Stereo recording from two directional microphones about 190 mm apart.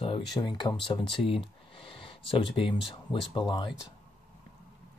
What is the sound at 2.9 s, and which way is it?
Speech, 25° left (ahead or behind).